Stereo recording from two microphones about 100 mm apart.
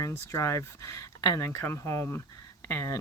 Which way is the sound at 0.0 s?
30° left (ahead or behind).